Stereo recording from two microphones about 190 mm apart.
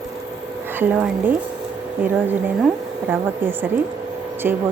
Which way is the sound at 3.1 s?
10° right (ahead or behind).